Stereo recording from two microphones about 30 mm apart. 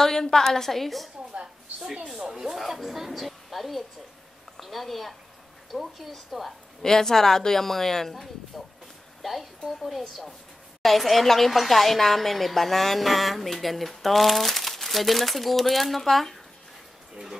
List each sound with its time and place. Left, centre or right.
0.0 s speech: centre
1.3 s a sound: right
2.1 s speech: right
2.5 s a woman's voice: centre
6.8 s a woman's voice: centre